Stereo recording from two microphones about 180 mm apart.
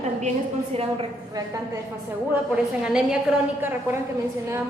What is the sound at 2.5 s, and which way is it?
A woman's voice, 5° right (ahead or behind).